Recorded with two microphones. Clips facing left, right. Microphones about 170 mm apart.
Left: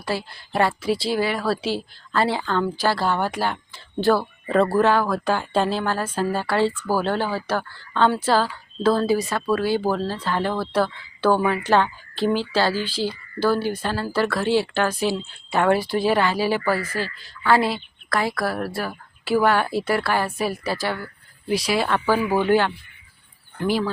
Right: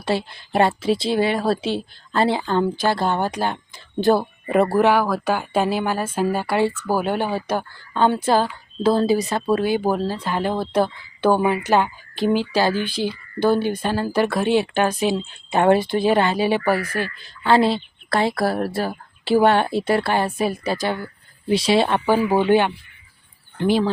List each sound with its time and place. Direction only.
0.0 s speech: 25° right (ahead or behind)